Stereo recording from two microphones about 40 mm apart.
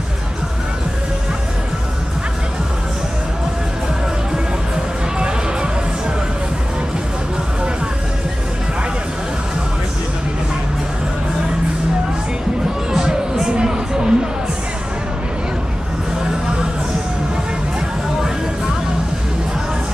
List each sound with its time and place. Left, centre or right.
12.9 s music: centre